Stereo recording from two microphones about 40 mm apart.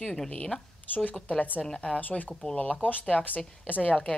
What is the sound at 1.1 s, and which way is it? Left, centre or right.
Speech, left.